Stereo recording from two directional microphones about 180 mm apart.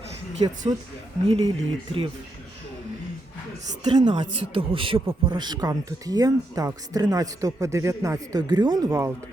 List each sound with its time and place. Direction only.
0.7 s speech: 30° right (ahead or behind)
3.8 s speech: 25° right (ahead or behind)